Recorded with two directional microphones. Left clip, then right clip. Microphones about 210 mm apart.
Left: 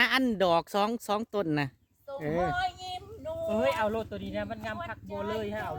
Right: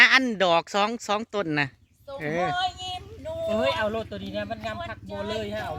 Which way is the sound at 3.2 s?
5° right (ahead or behind).